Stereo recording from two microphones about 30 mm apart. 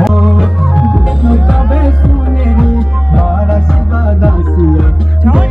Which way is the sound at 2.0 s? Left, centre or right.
Centre.